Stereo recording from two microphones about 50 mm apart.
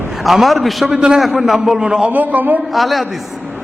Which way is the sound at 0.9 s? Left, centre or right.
Centre.